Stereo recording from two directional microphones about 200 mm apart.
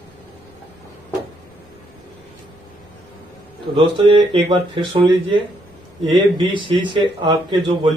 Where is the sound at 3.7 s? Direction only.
25° right (ahead or behind).